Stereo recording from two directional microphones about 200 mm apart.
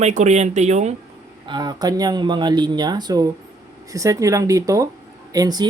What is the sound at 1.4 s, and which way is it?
Speech, 20° right (ahead or behind).